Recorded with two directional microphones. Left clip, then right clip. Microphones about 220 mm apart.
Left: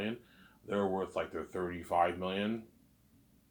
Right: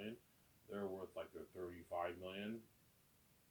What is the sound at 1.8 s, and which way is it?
Speech, 20° left (ahead or behind).